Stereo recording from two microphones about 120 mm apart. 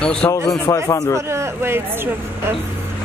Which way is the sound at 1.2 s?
20° right (ahead or behind).